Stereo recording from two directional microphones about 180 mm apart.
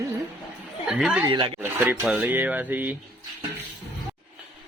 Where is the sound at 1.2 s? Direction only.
25° right (ahead or behind).